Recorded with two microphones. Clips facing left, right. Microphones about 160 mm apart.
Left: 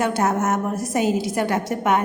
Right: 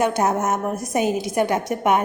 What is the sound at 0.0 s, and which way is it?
A woman's voice, 20° right (ahead or behind).